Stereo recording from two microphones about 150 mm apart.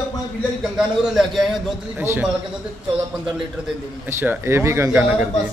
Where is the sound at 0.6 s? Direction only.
Centre (ahead or behind).